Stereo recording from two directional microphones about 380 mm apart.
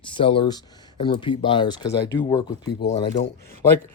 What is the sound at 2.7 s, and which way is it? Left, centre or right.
Speech, left.